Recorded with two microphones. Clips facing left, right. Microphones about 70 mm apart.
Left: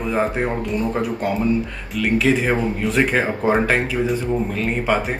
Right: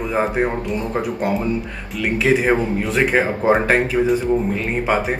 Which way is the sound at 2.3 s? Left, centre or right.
Centre.